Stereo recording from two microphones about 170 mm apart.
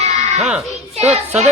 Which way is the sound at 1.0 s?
40° right (ahead or behind).